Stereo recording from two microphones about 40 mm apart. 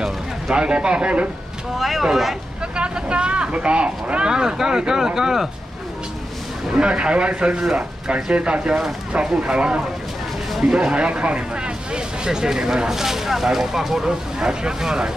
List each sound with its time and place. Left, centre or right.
0.0 s speech: centre
1.8 s speech: centre
2.7 s speech: right
6.7 s speech: right
10.5 s speech: centre
12.3 s speech: centre
14.4 s speech: centre